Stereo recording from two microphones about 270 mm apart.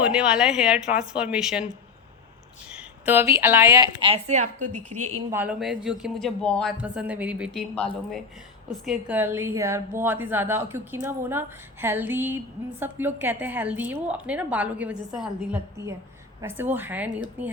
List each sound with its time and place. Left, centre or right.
0.0 s a man's voice: centre
2.7 s a woman's voice: centre; by 4.4 s right
4.6 s a woman's voice: right
4.9 s speech: right
5.3 s a man's voice: centre